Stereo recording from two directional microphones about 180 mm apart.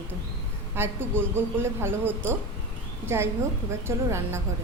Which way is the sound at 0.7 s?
15° right (ahead or behind).